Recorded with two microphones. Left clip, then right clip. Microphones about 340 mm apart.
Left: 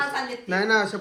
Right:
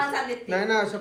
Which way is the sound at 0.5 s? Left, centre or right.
Left.